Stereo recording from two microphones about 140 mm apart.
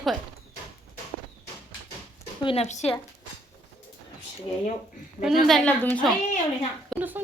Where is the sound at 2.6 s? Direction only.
55° left (ahead or behind).